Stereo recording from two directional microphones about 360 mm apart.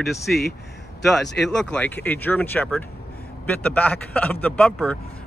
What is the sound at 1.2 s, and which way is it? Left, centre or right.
Speech, left.